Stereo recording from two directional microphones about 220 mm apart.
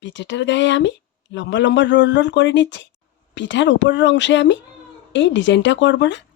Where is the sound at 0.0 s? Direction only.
55° left (ahead or behind).